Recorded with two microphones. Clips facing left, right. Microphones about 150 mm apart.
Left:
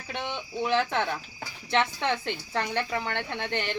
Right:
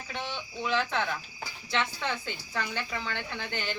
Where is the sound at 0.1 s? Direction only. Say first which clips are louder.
Left 4 dB; 60° left (ahead or behind).